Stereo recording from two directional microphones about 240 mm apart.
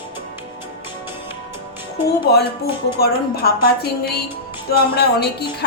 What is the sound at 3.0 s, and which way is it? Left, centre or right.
A woman's voice, left.